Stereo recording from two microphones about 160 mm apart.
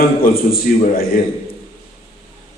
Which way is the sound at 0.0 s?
65° left (ahead or behind).